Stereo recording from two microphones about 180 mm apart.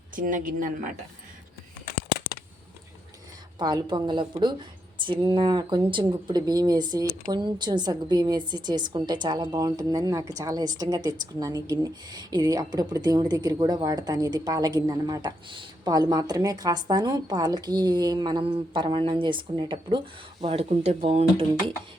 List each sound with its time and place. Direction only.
0.2 s speech: 45° right (ahead or behind)
3.6 s a woman's voice: 25° right (ahead or behind)
20.4 s speech: 35° right (ahead or behind)